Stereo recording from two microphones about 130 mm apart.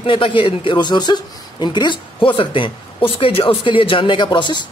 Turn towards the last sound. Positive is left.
turn(degrees=35)  # may be behind; listen again after turning